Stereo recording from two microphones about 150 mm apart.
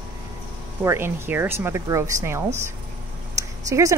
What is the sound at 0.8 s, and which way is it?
Speech, 15° right (ahead or behind).